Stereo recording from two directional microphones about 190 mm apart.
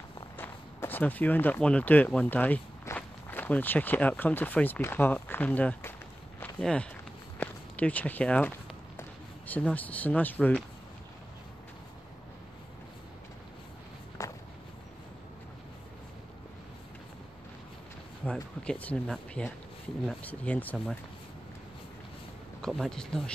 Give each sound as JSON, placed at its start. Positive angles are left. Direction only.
{"t": 0.4, "sound": "speech", "side_deg": 10}
{"t": 6.4, "sound": "walk", "side_deg": 5}
{"t": 9.5, "sound": "speech", "side_deg": 5}
{"t": 14.2, "sound": "walk", "side_deg": 15}
{"t": 18.2, "sound": "speech", "side_deg": 5}
{"t": 22.6, "sound": "speech", "side_deg": 0}